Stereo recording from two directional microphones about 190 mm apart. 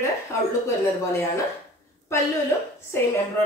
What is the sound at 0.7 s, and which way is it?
Speech, 15° left (ahead or behind).